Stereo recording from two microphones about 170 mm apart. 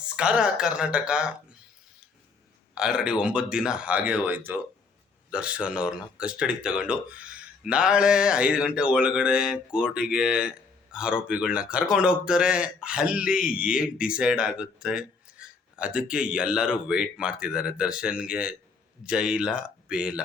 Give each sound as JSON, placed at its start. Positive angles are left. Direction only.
{"t": 0.2, "sound": "speech", "side_deg": -5}
{"t": 2.7, "sound": "speech", "side_deg": -5}